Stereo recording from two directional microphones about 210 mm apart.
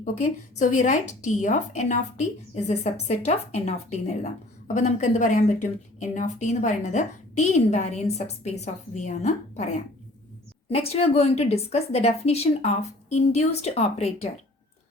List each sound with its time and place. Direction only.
0.0 s a woman's voice: 35° left (ahead or behind)
10.8 s a woman's voice: 30° left (ahead or behind)